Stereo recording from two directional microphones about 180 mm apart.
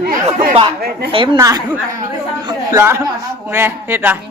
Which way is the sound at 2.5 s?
15° right (ahead or behind).